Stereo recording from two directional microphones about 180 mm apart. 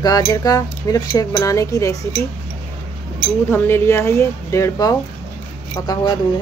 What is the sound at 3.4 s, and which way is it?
A woman's voice, 10° left (ahead or behind).